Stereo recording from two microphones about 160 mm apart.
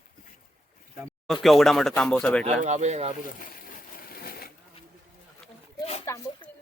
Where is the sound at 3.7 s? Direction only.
60° left (ahead or behind).